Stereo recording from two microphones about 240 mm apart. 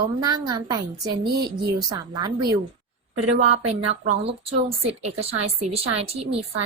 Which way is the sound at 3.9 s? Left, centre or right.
Right.